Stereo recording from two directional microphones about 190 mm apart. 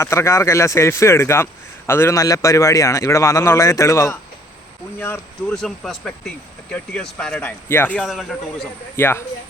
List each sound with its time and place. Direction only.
0.0 s speech: 15° left (ahead or behind)
9.0 s speech: 10° left (ahead or behind)